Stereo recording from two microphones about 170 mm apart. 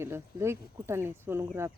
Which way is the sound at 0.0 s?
15° right (ahead or behind).